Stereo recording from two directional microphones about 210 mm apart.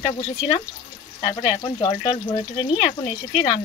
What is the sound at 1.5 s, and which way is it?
Speech, 15° left (ahead or behind).